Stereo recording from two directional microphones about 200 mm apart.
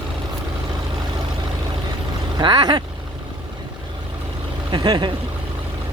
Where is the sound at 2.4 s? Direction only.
20° right (ahead or behind).